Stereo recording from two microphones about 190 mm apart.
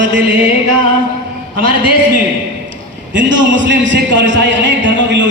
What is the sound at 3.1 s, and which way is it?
A man's voice, 75° right (ahead or behind).